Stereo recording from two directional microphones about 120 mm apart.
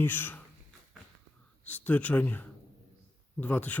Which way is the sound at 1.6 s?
15° left (ahead or behind).